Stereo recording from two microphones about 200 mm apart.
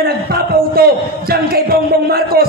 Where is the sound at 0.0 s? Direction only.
50° right (ahead or behind).